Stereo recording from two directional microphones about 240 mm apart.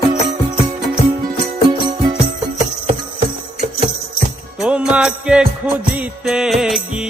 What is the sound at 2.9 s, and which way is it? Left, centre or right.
Music, right.